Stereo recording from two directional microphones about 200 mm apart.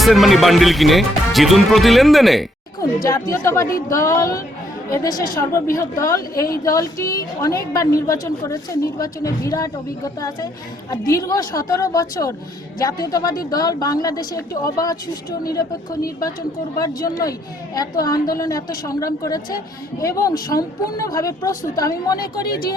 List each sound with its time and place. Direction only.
0.0 s speech: centre (ahead or behind)
3.0 s a woman's voice: 15° left (ahead or behind)
16.7 s a woman's voice: 15° left (ahead or behind)